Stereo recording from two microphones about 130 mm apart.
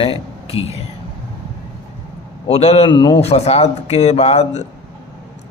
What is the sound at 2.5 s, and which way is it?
Speech, 55° left (ahead or behind).